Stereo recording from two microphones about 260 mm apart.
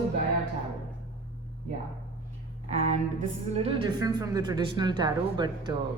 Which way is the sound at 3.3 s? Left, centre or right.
Right.